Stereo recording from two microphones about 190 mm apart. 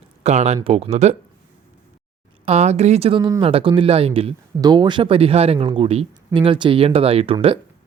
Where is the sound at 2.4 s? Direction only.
35° right (ahead or behind).